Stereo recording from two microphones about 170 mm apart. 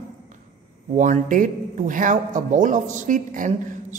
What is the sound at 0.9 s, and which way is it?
A woman's voice, 50° right (ahead or behind).